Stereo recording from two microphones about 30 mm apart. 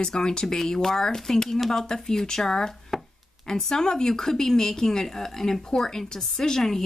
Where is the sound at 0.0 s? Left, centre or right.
Left.